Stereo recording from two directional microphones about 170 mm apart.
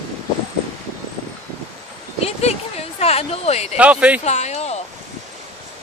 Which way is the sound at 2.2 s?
40° left (ahead or behind).